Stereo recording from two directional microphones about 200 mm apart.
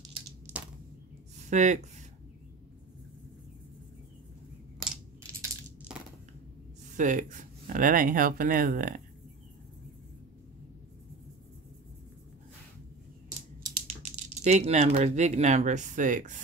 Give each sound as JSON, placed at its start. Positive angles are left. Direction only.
{"t": 0.5, "sound": "a sound", "side_deg": -5}
{"t": 1.5, "sound": "speech", "side_deg": -35}
{"t": 7.0, "sound": "speech", "side_deg": -40}
{"t": 14.1, "sound": "speech", "side_deg": -35}